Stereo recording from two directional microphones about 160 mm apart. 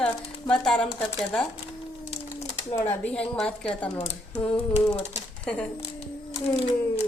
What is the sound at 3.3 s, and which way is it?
Speech, 5° left (ahead or behind).